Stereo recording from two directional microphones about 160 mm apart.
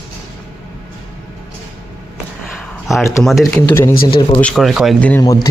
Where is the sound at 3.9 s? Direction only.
65° left (ahead or behind).